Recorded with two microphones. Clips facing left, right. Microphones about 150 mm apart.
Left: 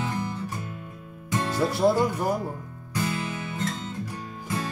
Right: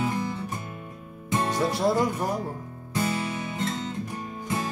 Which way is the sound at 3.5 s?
20° right (ahead or behind).